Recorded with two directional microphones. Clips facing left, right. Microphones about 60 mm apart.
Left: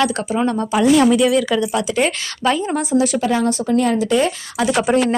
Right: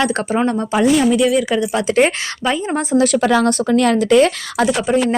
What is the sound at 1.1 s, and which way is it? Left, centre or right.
Speech, centre.